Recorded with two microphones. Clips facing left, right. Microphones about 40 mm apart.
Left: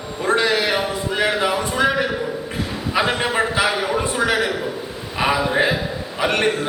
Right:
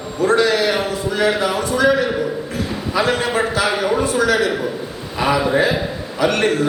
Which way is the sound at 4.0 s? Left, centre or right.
Left.